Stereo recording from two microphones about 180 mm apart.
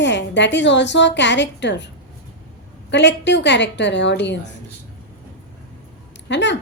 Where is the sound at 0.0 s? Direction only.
75° left (ahead or behind).